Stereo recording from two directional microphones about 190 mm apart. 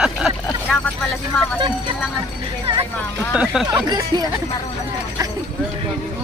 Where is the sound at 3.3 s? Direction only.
5° right (ahead or behind).